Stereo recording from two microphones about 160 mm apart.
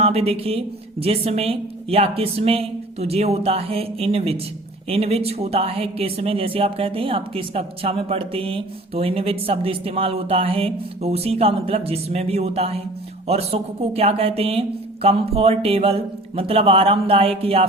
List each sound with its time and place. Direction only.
0.0 s speech: 40° right (ahead or behind)